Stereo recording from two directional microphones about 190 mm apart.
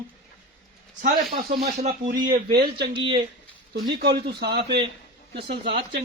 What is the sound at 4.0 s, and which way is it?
Speech, 60° right (ahead or behind).